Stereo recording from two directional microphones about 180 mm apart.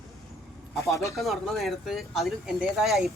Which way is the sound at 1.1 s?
Centre (ahead or behind).